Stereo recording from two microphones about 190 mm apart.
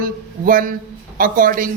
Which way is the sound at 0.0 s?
45° right (ahead or behind).